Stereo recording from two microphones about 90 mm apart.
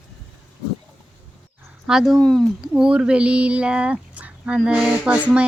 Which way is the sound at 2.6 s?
10° right (ahead or behind).